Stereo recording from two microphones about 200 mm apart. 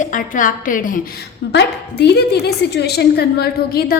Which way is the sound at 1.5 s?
55° left (ahead or behind).